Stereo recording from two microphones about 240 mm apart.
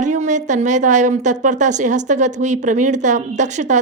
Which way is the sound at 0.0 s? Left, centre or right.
Right.